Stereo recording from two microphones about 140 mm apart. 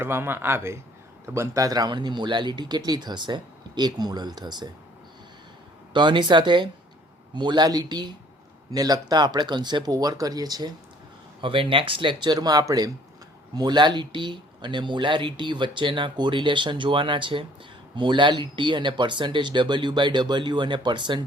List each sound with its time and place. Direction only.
0.0 s a man's voice: 15° right (ahead or behind)
5.9 s speech: 35° right (ahead or behind)